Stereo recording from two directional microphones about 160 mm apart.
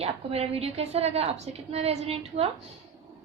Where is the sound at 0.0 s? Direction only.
40° right (ahead or behind).